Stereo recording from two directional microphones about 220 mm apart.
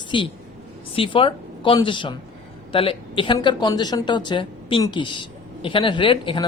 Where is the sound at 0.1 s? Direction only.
20° left (ahead or behind).